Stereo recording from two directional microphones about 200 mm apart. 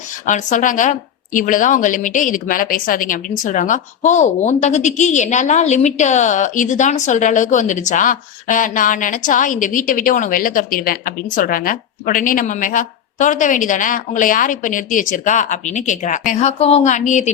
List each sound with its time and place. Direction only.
0.3 s a woman's voice: 40° left (ahead or behind)